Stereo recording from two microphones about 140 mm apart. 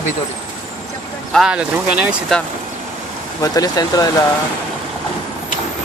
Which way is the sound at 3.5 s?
25° left (ahead or behind).